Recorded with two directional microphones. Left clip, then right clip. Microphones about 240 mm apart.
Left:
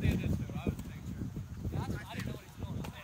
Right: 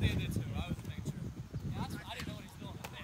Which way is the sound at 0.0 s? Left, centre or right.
Right.